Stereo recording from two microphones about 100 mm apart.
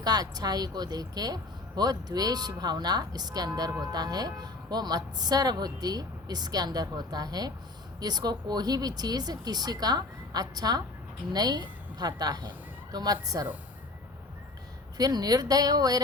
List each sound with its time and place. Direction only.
0.0 s a woman's voice: 40° right (ahead or behind)
14.9 s a woman's voice: 40° right (ahead or behind)